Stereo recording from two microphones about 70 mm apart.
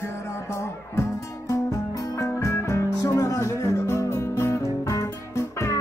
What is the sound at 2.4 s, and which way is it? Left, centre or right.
Music, left.